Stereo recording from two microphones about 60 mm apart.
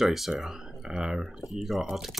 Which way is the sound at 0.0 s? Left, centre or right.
Centre.